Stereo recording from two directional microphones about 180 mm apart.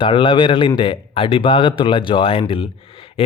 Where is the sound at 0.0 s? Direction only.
25° left (ahead or behind).